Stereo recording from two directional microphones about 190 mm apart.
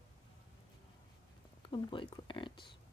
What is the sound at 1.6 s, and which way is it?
Speech, 25° left (ahead or behind).